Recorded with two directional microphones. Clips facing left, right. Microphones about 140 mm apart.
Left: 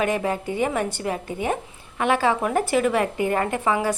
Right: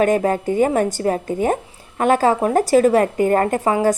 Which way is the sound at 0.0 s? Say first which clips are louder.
Right 7 dB; 45° right (ahead or behind).